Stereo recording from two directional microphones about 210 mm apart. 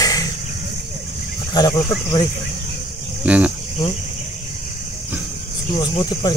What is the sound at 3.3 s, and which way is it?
Speech, 5° right (ahead or behind).